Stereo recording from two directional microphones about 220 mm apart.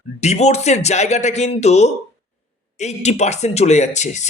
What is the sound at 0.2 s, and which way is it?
A man's voice, 30° left (ahead or behind).